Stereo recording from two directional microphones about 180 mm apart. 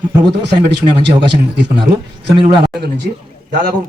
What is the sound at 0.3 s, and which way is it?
A man's voice, 70° right (ahead or behind).